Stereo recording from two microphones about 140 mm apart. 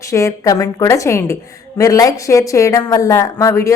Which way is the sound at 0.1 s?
20° left (ahead or behind).